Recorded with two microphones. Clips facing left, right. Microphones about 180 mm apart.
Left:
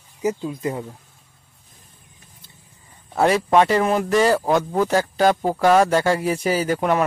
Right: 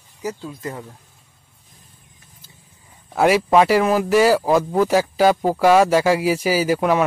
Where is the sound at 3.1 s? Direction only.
5° right (ahead or behind).